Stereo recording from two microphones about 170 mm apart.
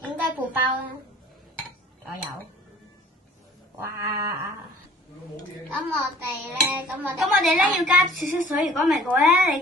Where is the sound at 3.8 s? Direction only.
15° right (ahead or behind).